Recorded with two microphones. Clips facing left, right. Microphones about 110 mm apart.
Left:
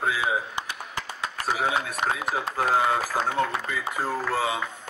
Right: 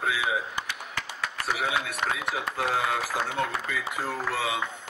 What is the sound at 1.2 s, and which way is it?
Speech, 30° left (ahead or behind).